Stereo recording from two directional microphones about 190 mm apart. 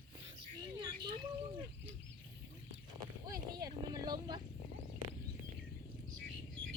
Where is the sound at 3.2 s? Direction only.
20° right (ahead or behind).